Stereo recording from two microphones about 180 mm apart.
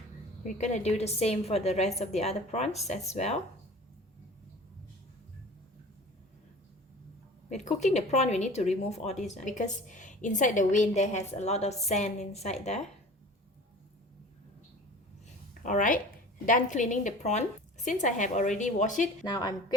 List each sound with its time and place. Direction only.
0.4 s speech: 40° left (ahead or behind)
7.5 s a woman's voice: 40° left (ahead or behind)
15.6 s a woman's voice: 45° left (ahead or behind)
19.2 s a woman's voice: 25° left (ahead or behind)